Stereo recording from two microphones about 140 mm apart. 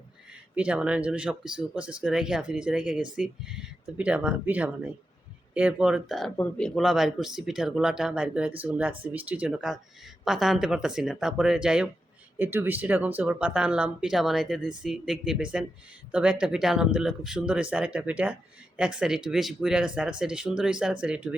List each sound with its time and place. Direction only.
0.5 s speech: 10° right (ahead or behind)